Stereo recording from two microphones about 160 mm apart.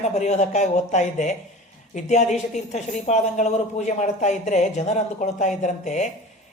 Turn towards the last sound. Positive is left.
turn(degrees=50)  # may be behind; listen again after turning